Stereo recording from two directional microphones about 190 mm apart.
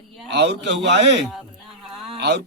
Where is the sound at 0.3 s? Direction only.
65° right (ahead or behind).